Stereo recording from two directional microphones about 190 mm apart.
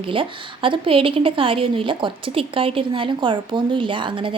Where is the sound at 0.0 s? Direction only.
25° right (ahead or behind).